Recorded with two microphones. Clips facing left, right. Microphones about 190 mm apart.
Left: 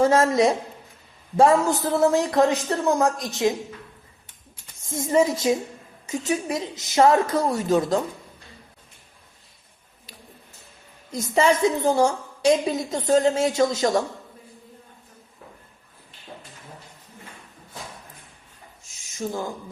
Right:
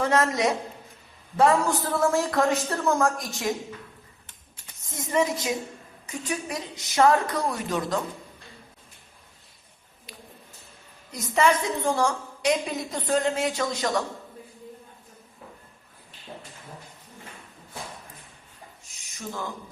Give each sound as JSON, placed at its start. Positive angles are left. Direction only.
{"t": 0.0, "sound": "a woman's voice", "side_deg": 30}
{"t": 4.9, "sound": "a woman's voice", "side_deg": 25}
{"t": 11.1, "sound": "a woman's voice", "side_deg": 25}